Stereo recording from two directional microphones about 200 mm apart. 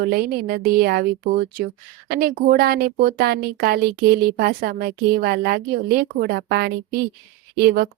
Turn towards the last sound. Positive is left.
turn(degrees=-50)  # may be behind; listen again after turning